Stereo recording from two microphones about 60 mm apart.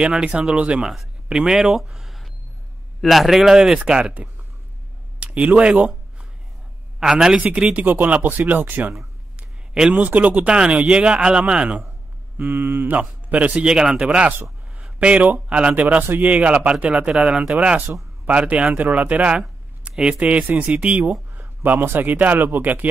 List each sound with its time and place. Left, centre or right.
0.2 s speech: right
0.8 s speech: centre
1.8 s a sound: centre
3.0 s speech: centre
5.2 s speech: right
7.0 s speech: centre
7.7 s speech: right
8.9 s a sound: centre
10.0 s speech: right
12.5 s speech: right
13.7 s speech: centre
14.0 s a man's voice: right
21.6 s speech: right